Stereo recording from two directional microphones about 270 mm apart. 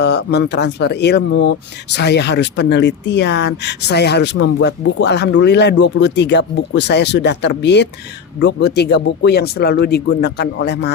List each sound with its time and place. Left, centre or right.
0.0 s speech: left